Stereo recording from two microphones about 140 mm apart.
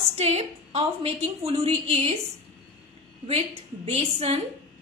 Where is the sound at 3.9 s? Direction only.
45° right (ahead or behind).